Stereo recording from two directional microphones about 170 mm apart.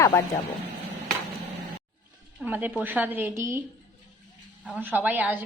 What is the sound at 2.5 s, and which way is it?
A woman's voice, 10° right (ahead or behind).